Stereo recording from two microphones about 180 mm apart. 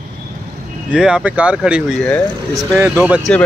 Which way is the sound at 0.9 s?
5° right (ahead or behind).